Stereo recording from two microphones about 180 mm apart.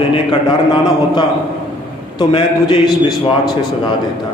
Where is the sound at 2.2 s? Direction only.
25° left (ahead or behind).